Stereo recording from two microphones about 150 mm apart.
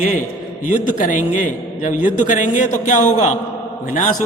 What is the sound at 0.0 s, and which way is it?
A man's voice, 60° left (ahead or behind).